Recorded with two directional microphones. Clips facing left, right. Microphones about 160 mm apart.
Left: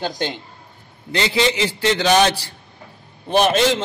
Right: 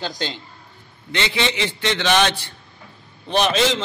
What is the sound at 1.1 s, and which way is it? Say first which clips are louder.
A man's voice: left 4 dB; 35° left (ahead or behind).